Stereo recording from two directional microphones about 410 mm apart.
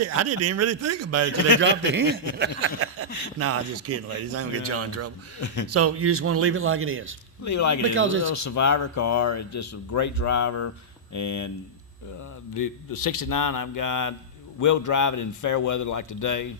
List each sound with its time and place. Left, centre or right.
0.0 s speech: right
1.6 s a man's voice: right
7.4 s speech: left
7.9 s a man's voice: right
8.3 s speech: left
12.5 s speech: left